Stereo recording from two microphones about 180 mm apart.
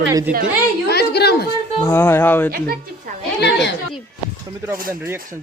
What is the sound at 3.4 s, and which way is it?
Speech, 75° left (ahead or behind).